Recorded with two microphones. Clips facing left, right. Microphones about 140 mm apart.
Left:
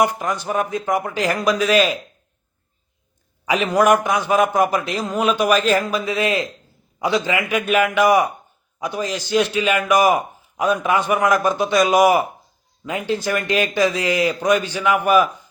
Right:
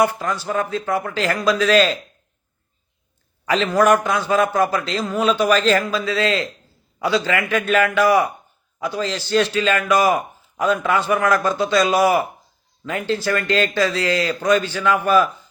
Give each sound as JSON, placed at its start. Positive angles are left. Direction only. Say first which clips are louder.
{"t": 0.0, "sound": "a man's voice", "louder": "even", "side_deg": 15}
{"t": 3.4, "sound": "a man's voice", "louder": "even", "side_deg": 10}